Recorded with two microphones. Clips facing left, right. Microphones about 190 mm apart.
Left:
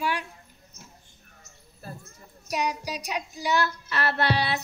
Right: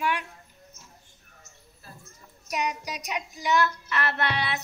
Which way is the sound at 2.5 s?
35° left (ahead or behind).